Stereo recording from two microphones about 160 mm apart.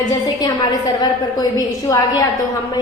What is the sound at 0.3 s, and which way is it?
A woman's voice, 25° left (ahead or behind).